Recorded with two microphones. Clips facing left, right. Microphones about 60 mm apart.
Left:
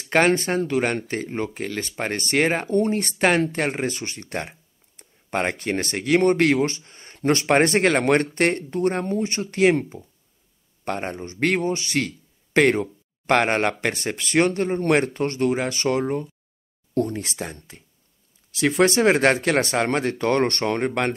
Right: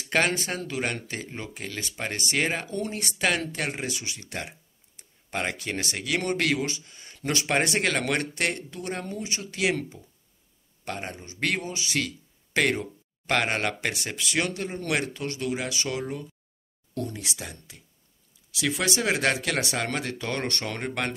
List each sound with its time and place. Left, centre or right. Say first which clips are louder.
0.1 s speech: left 7 dB; left